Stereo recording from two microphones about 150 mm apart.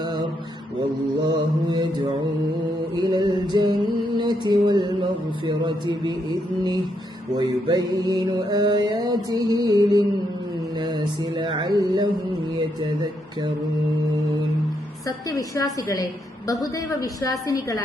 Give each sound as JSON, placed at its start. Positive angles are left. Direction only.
{"t": 0.0, "sound": "mantra", "side_deg": -30}
{"t": 1.3, "sound": "mantra", "side_deg": -30}
{"t": 2.9, "sound": "music", "side_deg": -30}
{"t": 4.2, "sound": "mantra", "side_deg": -30}
{"t": 5.5, "sound": "a sound", "side_deg": -30}
{"t": 7.3, "sound": "mantra", "side_deg": -30}
{"t": 15.0, "sound": "a woman's voice", "side_deg": 20}